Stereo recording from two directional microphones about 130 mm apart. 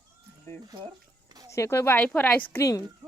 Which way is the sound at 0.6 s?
30° right (ahead or behind).